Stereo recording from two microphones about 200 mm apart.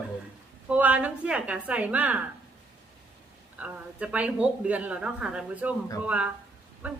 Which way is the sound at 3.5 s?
5° right (ahead or behind).